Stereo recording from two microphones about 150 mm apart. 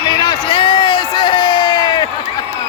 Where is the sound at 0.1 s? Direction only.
30° left (ahead or behind).